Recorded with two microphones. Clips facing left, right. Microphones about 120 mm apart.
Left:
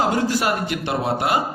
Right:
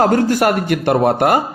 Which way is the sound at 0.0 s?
55° right (ahead or behind).